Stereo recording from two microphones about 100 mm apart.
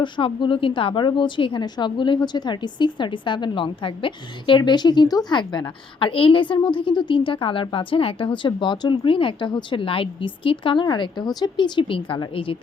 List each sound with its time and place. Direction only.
0.0 s a woman's voice: 55° left (ahead or behind)